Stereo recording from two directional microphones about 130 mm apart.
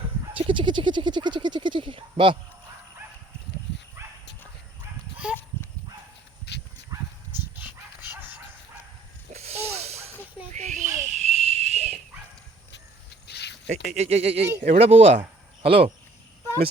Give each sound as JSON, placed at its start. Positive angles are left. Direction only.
{"t": 0.3, "sound": "speech", "side_deg": -40}
{"t": 5.1, "sound": "dog", "side_deg": -10}
{"t": 7.3, "sound": "dog", "side_deg": -15}
{"t": 9.3, "sound": "a sound", "side_deg": -55}
{"t": 10.5, "sound": "a sound", "side_deg": -65}
{"t": 13.7, "sound": "speech", "side_deg": -55}